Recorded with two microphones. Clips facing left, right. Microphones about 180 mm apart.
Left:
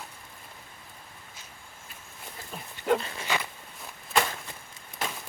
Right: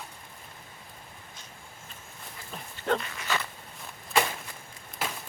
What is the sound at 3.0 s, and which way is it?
Speech, 30° left (ahead or behind).